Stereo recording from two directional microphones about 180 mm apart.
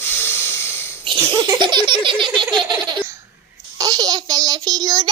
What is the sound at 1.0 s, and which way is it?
Laughter, 25° right (ahead or behind).